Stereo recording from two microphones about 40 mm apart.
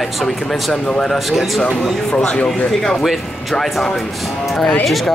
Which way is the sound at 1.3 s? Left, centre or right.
Centre.